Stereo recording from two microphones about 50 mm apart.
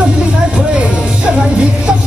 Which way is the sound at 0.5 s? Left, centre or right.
Centre.